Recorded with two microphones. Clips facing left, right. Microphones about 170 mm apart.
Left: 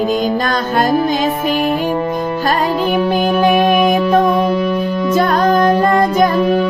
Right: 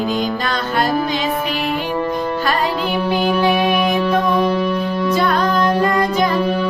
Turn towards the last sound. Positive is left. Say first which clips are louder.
# left 4 dB
turn(degrees=45)  # may be behind; listen again after turning